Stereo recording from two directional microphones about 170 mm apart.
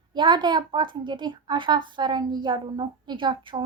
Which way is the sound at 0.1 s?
25° right (ahead or behind).